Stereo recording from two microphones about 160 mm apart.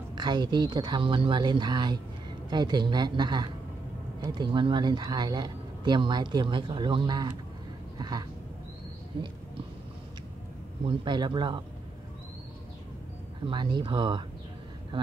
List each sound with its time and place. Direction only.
0.1 s speech: 25° right (ahead or behind)
10.8 s speech: 30° right (ahead or behind)
13.5 s speech: 30° right (ahead or behind)